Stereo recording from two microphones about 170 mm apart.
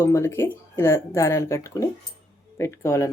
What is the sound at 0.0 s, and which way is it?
Speech, 15° left (ahead or behind).